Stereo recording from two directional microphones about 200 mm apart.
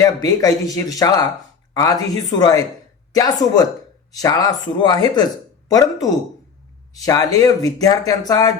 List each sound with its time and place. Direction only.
0.0 s speech: 20° left (ahead or behind)